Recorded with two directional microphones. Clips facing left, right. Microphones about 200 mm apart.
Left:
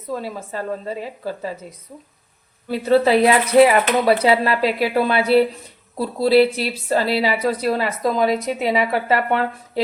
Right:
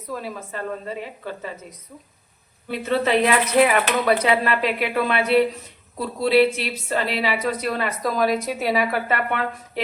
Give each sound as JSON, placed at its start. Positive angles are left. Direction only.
{"t": 0.1, "sound": "a woman's voice", "side_deg": 30}
{"t": 2.6, "sound": "a woman's voice", "side_deg": 35}